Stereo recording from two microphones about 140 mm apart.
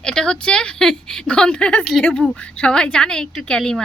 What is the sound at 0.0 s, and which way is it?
A woman's voice, 5° left (ahead or behind).